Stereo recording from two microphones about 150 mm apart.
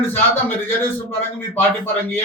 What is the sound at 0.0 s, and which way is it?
A man's voice, 15° left (ahead or behind).